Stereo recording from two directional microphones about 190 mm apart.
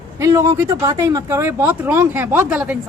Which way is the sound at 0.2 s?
15° right (ahead or behind).